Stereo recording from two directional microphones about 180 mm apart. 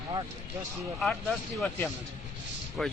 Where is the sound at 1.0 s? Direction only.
Centre (ahead or behind).